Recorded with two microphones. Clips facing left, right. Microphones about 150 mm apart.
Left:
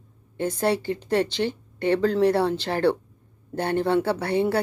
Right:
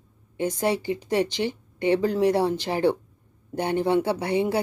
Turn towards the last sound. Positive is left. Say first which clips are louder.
# left 1 dB
turn(degrees=-15)  # may be behind; listen again after turning